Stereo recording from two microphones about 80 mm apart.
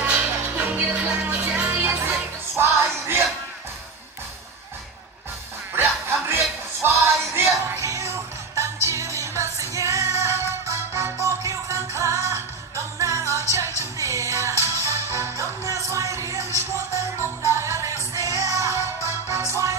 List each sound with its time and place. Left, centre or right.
0.0 s music: centre
1.9 s music: right
5.8 s music: right